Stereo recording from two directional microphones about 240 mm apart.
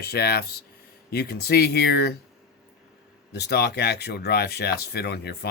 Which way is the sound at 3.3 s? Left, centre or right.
Left.